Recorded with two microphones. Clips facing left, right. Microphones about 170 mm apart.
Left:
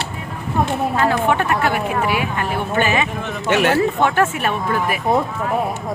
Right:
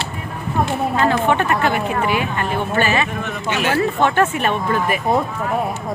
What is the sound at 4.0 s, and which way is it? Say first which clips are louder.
Speech: right 1 dB; 5° left (ahead or behind).